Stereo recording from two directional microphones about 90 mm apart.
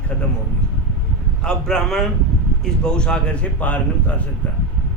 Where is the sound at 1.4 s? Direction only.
10° left (ahead or behind).